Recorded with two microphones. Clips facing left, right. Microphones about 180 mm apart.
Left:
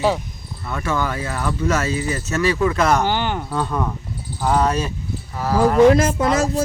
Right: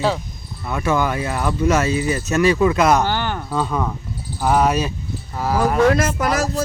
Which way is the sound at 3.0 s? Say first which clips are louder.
Left 1 dB; 15° left (ahead or behind).